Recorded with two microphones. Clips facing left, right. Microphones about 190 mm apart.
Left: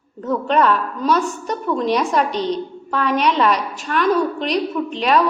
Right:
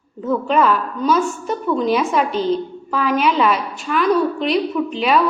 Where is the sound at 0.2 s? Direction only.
5° right (ahead or behind).